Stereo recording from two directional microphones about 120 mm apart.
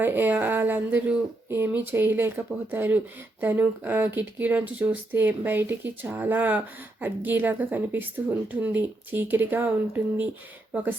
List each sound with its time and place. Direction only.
0.0 s speech: 15° right (ahead or behind)